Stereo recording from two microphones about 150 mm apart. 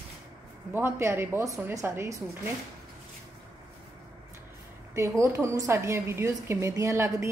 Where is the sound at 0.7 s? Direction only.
15° right (ahead or behind).